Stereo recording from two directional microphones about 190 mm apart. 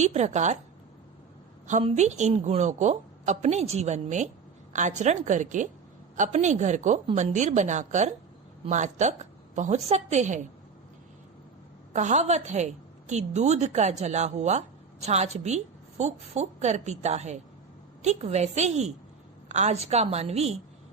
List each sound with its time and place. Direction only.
0.0 s a woman's voice: 35° right (ahead or behind)
1.6 s a woman's voice: 40° right (ahead or behind)
11.9 s a woman's voice: 40° right (ahead or behind)